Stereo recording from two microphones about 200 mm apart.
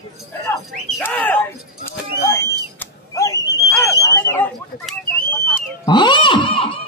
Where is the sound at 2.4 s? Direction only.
15° left (ahead or behind).